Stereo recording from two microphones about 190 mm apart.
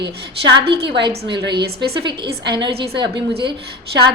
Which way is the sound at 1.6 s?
55° right (ahead or behind).